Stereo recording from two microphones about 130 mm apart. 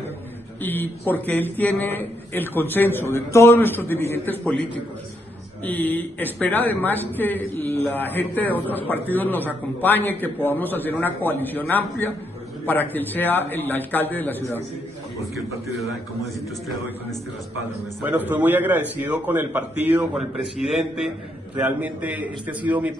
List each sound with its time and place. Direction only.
0.6 s a man's voice: 15° left (ahead or behind)
5.7 s a man's voice: 15° left (ahead or behind)
18.0 s a man's voice: 15° right (ahead or behind)